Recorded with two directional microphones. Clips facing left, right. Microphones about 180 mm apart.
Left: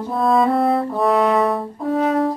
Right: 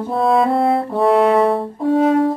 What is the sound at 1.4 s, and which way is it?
Music, 30° right (ahead or behind).